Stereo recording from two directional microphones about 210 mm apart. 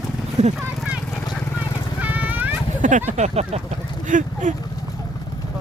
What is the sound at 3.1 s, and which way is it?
Speech, 30° right (ahead or behind).